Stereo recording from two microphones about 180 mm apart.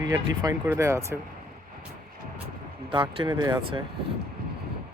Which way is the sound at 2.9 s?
25° right (ahead or behind).